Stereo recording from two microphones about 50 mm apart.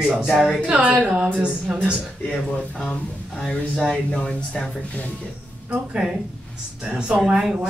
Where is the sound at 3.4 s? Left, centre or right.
Centre.